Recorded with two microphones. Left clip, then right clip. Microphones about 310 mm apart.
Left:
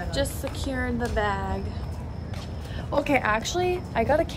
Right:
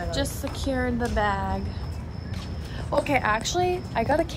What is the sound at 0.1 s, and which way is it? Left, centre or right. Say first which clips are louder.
A woman's voice: left 1 dB; centre.